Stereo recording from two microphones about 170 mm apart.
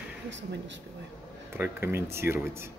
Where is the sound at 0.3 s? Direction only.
90° right.